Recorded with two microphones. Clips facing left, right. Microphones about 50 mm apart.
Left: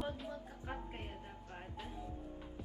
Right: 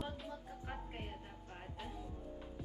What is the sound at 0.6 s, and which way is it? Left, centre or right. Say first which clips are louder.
Music: left 1 dB; centre.